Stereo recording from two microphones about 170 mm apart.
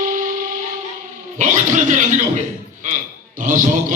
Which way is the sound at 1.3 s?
45° right (ahead or behind).